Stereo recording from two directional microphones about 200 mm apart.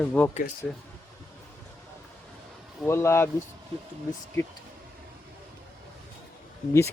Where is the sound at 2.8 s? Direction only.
15° left (ahead or behind).